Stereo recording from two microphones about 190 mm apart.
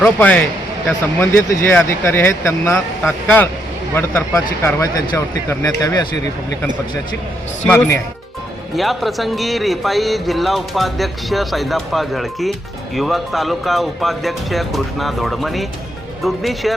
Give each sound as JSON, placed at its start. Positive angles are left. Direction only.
{"t": 0.0, "sound": "speech", "side_deg": 5}
{"t": 7.7, "sound": "speech", "side_deg": 10}